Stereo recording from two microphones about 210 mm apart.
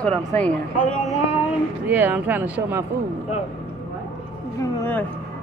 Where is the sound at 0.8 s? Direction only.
35° left (ahead or behind).